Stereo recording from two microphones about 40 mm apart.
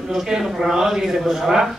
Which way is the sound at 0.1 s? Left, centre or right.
Centre.